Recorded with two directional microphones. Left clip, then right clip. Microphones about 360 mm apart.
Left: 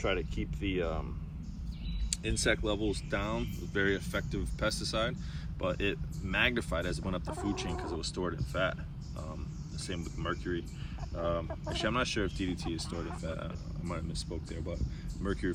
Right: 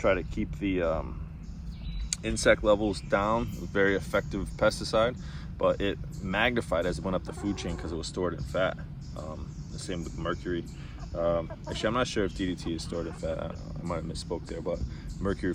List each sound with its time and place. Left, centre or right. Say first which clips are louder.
0.0 s speech: right 7 dB; right
2.2 s speech: right 8 dB; centre
9.8 s speech: right 4 dB; centre